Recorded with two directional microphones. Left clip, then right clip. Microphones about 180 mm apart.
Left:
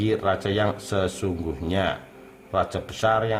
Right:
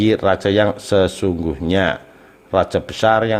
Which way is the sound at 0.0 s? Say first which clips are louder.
Right 8 dB; 35° right (ahead or behind).